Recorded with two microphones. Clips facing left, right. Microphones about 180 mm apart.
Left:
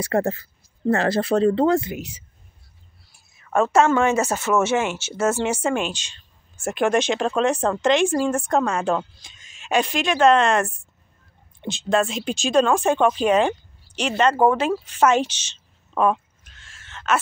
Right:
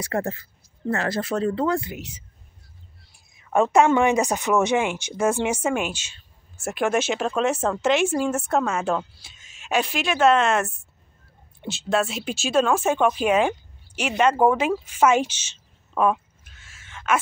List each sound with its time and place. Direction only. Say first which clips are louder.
0.0 s speech: left 5 dB; 35° left (ahead or behind)
3.3 s speech: even; 15° right (ahead or behind)
14.9 s a sound: even; 10° right (ahead or behind)